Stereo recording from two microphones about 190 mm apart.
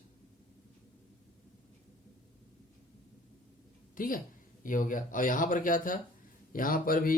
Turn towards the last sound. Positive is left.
turn(degrees=50)  # may be behind; listen again after turning